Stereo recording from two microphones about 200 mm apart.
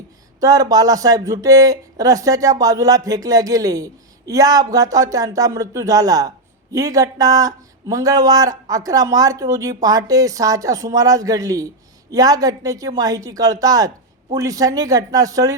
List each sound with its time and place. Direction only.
0.3 s speech: 15° right (ahead or behind)